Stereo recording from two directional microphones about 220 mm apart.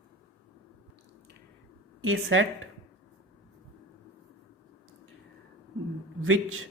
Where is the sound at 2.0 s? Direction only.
65° right (ahead or behind).